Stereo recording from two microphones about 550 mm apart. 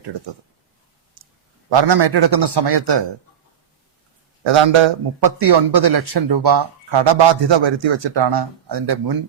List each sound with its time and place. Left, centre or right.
1.2 s clicking: right
1.7 s a man's voice: right
4.4 s a man's voice: right